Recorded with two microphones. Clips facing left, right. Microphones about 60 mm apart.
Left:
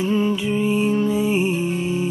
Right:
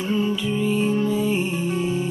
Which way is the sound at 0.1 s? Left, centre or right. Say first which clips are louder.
Right 1 dB; left.